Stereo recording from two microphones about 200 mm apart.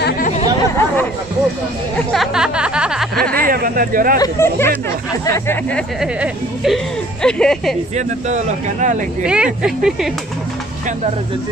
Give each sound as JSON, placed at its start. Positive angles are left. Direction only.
{"t": 0.7, "sound": "a sound", "side_deg": 10}
{"t": 2.1, "sound": "music", "side_deg": -5}
{"t": 3.4, "sound": "speech", "side_deg": -45}
{"t": 4.2, "sound": "speech", "side_deg": 10}
{"t": 5.9, "sound": "speech", "side_deg": 0}
{"t": 8.3, "sound": "speech", "side_deg": -35}
{"t": 9.2, "sound": "speech", "side_deg": -5}